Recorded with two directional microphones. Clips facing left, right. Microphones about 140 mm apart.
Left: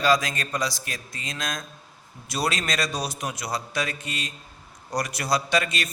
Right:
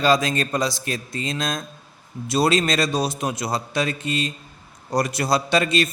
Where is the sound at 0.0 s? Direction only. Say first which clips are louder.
Right 3 dB; 25° right (ahead or behind).